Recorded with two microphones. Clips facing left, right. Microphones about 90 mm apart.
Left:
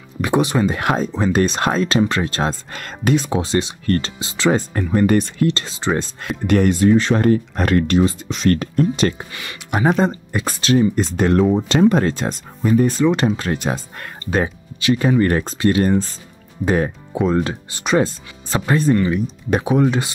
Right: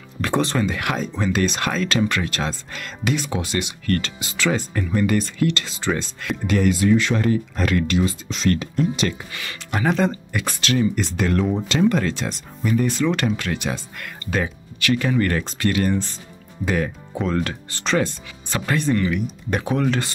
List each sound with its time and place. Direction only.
0.2 s speech: 15° left (ahead or behind)
0.7 s speech: 35° left (ahead or behind)
1.9 s speech: 25° left (ahead or behind)
2.7 s speech: 45° left (ahead or behind)
3.3 s speech: 25° left (ahead or behind)
4.6 s speech: 40° left (ahead or behind)
5.5 s speech: 25° left (ahead or behind)
5.9 s speech: 50° left (ahead or behind)
9.9 s speech: 25° left (ahead or behind); by 12.7 s 45° left (ahead or behind)
13.0 s speech: 25° left (ahead or behind)
13.4 s speech: 35° left (ahead or behind)
14.8 s speech: 20° left (ahead or behind)
17.1 s speech: 15° left (ahead or behind)
19.6 s speech: 15° left (ahead or behind)